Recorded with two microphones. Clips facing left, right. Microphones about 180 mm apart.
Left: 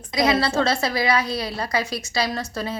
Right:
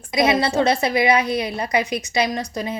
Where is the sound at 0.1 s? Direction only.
20° right (ahead or behind).